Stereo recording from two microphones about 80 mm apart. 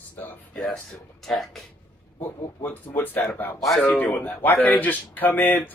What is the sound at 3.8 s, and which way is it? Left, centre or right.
Speech, left.